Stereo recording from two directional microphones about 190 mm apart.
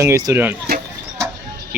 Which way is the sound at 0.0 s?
15° right (ahead or behind).